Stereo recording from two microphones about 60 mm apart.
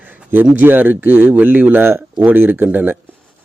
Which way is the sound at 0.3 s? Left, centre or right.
Right.